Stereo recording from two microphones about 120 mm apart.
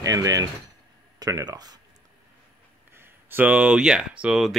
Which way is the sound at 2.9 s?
15° right (ahead or behind).